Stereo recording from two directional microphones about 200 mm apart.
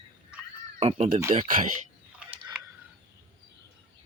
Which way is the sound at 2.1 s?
5° right (ahead or behind).